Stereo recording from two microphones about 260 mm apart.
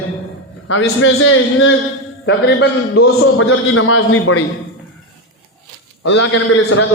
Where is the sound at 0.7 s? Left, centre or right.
Left.